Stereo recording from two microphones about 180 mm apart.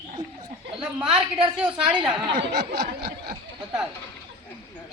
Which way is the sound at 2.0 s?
25° right (ahead or behind).